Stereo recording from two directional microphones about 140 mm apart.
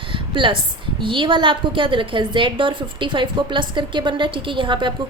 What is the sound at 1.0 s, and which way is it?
A woman's voice, 35° right (ahead or behind).